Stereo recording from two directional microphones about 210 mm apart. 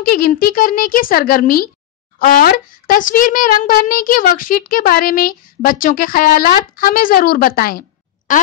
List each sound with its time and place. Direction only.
0.1 s a child's voice: 45° left (ahead or behind)